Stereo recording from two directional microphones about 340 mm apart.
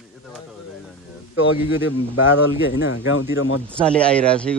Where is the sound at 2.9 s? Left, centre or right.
Left.